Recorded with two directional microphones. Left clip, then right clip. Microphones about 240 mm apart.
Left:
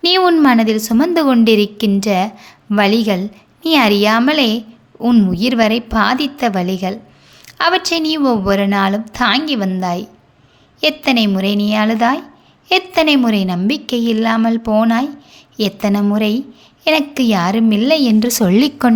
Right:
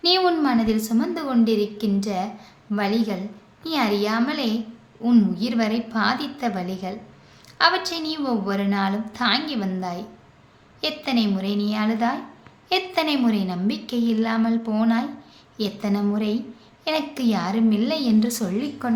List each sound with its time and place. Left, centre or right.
0.0 s a woman's voice: left